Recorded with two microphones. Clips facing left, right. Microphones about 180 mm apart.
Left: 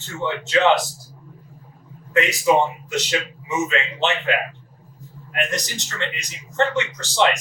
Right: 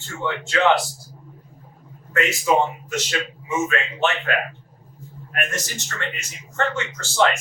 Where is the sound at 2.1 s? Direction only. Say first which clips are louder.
Left 2 dB; 15° left (ahead or behind).